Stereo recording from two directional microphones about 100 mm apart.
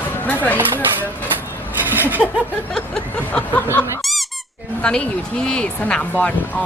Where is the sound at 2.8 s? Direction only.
5° left (ahead or behind).